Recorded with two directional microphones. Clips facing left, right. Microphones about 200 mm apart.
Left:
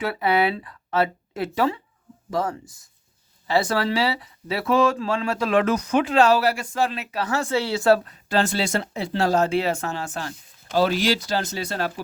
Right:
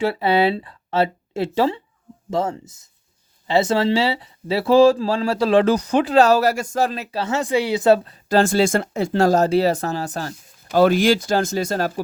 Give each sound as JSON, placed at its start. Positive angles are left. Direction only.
{"t": 0.0, "sound": "speech", "side_deg": -30}
{"t": 8.3, "sound": "speech", "side_deg": -45}